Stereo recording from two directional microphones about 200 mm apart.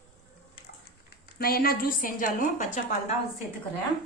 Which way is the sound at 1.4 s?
50° left (ahead or behind).